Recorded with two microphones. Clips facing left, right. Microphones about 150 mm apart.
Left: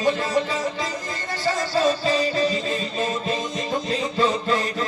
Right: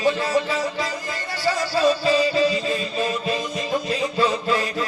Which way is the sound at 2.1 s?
20° left (ahead or behind).